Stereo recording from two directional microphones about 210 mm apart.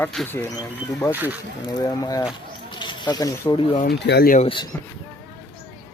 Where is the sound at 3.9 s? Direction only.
55° left (ahead or behind).